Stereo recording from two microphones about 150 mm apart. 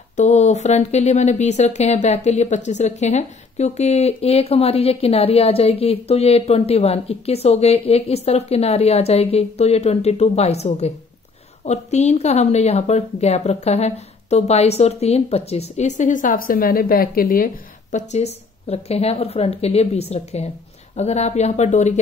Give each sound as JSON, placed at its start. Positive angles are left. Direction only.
{"t": 0.1, "sound": "speech", "side_deg": 50}
{"t": 17.9, "sound": "speech", "side_deg": 45}